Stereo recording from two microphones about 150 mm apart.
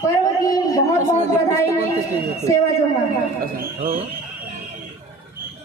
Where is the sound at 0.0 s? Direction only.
20° left (ahead or behind).